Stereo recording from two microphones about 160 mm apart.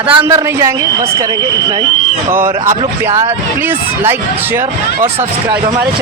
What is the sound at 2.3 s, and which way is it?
Speech, 15° right (ahead or behind).